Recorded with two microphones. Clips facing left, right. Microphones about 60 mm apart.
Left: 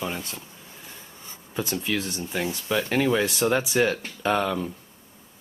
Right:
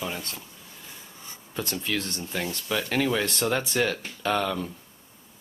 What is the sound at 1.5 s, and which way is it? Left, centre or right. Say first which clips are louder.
Speech: left 2 dB; centre.